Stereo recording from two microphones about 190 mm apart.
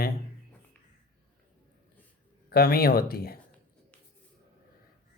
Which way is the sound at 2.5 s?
50° left (ahead or behind).